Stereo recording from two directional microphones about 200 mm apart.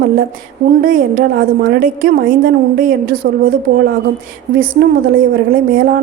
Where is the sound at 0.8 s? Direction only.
45° right (ahead or behind).